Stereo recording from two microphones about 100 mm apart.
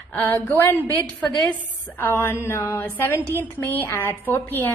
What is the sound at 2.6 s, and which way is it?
Mantra, 35° left (ahead or behind).